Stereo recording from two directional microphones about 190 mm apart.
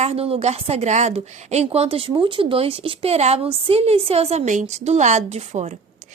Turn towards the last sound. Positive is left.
turn(degrees=-35)  # may be behind; listen again after turning